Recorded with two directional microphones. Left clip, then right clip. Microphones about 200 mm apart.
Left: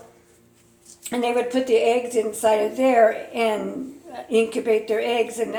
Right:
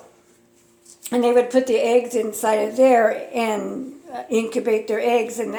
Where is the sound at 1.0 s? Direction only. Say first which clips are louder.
Right 5 dB; 35° right (ahead or behind).